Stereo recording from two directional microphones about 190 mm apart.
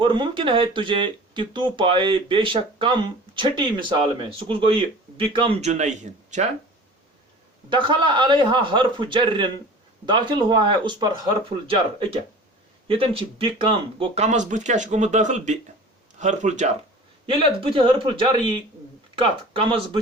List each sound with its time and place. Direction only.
0.0 s speech: 25° right (ahead or behind)
7.7 s speech: 25° right (ahead or behind)
17.2 s speech: 30° right (ahead or behind)